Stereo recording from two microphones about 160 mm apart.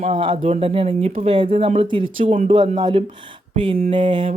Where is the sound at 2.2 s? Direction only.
55° right (ahead or behind).